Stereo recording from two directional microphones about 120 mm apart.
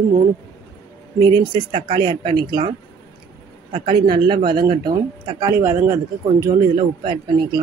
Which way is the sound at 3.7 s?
45° right (ahead or behind).